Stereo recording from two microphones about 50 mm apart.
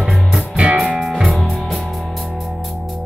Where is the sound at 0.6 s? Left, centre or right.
Right.